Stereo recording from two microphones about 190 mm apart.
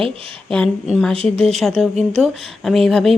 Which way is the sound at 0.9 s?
Centre (ahead or behind).